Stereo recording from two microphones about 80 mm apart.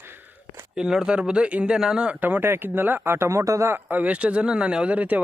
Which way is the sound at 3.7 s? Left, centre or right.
Right.